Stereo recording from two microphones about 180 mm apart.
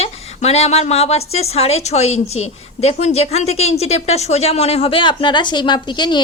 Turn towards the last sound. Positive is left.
turn(degrees=25)  # may be behind; listen again after turning